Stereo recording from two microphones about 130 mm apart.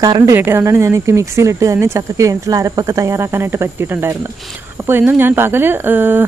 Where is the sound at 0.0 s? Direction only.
25° right (ahead or behind).